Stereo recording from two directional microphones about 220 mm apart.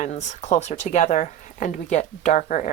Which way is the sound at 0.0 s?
30° left (ahead or behind).